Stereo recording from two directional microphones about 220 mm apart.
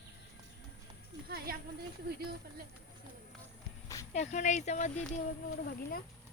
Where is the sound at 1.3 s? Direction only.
45° right (ahead or behind).